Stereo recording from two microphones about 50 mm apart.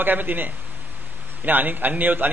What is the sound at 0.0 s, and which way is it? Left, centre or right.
A man's voice, right.